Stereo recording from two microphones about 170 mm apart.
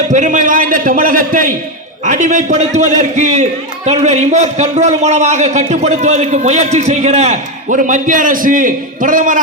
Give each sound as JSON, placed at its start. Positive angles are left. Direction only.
{"t": 0.1, "sound": "a man's voice", "side_deg": -50}